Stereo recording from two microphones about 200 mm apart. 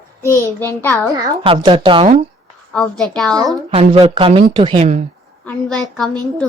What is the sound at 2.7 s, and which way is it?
Speech, 5° left (ahead or behind).